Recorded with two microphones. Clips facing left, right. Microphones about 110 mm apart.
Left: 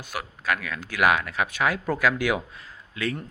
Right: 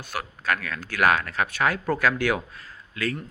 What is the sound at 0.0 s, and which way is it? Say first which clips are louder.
Speech: right 1 dB; 10° left (ahead or behind).